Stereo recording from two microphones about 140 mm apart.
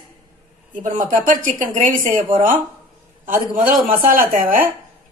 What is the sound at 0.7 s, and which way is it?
Speech, 70° right (ahead or behind).